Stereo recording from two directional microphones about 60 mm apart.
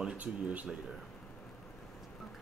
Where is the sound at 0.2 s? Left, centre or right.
Right.